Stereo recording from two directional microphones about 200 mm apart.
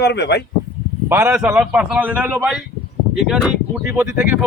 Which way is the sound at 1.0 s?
10° right (ahead or behind).